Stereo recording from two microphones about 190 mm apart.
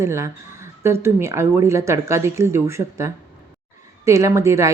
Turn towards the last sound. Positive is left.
turn(degrees=-15)  # may be behind; listen again after turning